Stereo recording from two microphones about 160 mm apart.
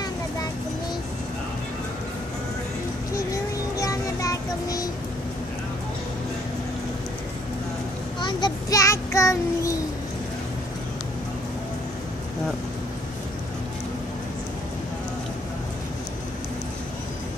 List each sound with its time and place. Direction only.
3.7 s music: 20° left (ahead or behind)
8.2 s child singing: 30° left (ahead or behind)